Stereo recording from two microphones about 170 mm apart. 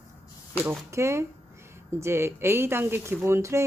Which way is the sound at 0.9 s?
15° right (ahead or behind).